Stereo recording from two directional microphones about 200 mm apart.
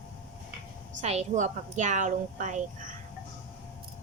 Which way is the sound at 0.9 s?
35° right (ahead or behind).